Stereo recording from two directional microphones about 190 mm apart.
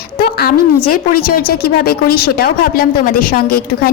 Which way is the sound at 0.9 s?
50° left (ahead or behind).